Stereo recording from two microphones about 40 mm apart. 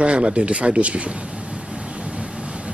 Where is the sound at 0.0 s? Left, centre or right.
Right.